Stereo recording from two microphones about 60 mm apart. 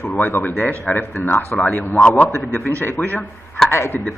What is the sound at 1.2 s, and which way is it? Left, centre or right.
Speech, left.